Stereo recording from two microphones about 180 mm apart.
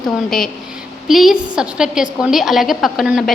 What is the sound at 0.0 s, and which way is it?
A woman's voice, centre (ahead or behind).